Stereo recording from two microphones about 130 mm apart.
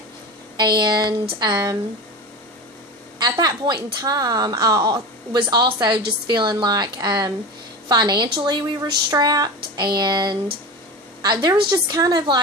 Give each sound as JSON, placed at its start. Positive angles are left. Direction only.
{"t": 0.5, "sound": "a woman's voice", "side_deg": -35}
{"t": 3.2, "sound": "a woman's voice", "side_deg": -30}
{"t": 11.4, "sound": "a woman's voice", "side_deg": -35}